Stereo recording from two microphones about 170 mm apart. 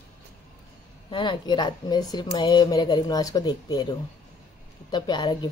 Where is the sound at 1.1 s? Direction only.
25° left (ahead or behind).